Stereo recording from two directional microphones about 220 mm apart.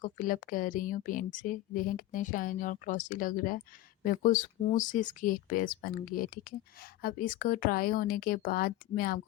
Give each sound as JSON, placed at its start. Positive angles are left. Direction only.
{"t": 0.0, "sound": "speech", "side_deg": 35}